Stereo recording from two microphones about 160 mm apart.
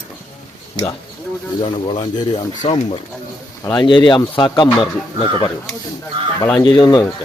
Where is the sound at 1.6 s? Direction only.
30° left (ahead or behind).